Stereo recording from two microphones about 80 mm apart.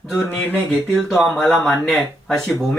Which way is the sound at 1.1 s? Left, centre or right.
Centre.